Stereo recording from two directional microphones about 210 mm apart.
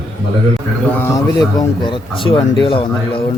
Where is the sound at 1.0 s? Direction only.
15° left (ahead or behind).